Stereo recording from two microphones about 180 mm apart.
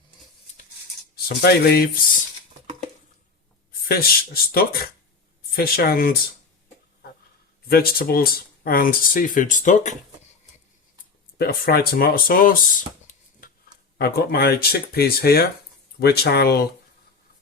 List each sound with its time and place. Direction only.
1.1 s speech: 60° left (ahead or behind)
3.7 s speech: 55° left (ahead or behind)
7.7 s speech: 55° left (ahead or behind)
11.3 s speech: 55° left (ahead or behind)
14.0 s speech: 60° left (ahead or behind)